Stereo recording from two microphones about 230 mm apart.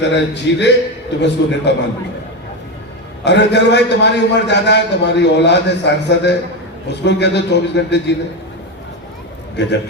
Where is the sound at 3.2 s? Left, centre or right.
Left.